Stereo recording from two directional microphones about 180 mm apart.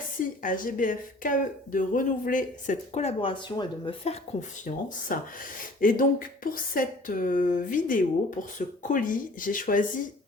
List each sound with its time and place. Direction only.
0.4 s speech: 50° left (ahead or behind)